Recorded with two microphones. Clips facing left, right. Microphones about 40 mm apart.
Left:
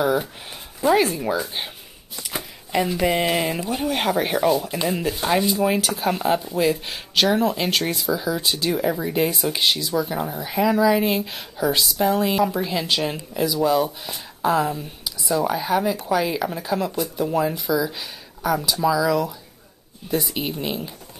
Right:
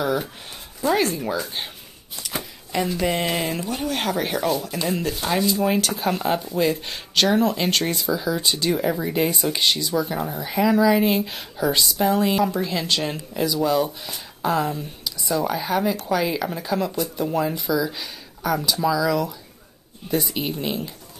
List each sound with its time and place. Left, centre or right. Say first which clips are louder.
0.0 s speech: left 3 dB; centre
5.6 s speech: left 1 dB; centre